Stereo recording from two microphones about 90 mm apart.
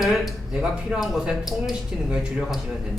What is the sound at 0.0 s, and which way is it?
Speech, centre (ahead or behind).